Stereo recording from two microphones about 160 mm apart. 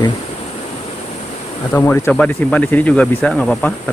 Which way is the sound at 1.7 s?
15° left (ahead or behind).